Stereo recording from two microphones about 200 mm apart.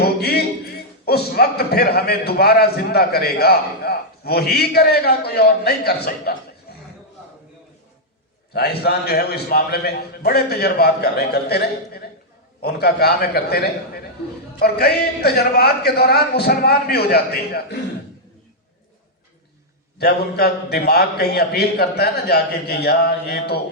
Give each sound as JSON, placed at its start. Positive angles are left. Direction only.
{"t": 0.2, "sound": "music", "side_deg": 50}
{"t": 1.0, "sound": "a man's voice", "side_deg": 50}
{"t": 6.7, "sound": "a sound", "side_deg": 50}
{"t": 8.5, "sound": "a man's voice", "side_deg": 50}
{"t": 20.0, "sound": "a man's voice", "side_deg": 50}